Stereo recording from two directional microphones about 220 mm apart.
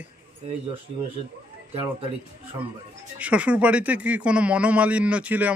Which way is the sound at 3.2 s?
5° right (ahead or behind).